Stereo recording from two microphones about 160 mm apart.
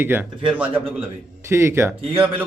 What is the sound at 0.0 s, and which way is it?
Speech, 10° right (ahead or behind).